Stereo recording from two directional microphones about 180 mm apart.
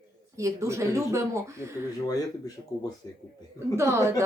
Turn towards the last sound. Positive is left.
turn(degrees=-15)  # may be behind; listen again after turning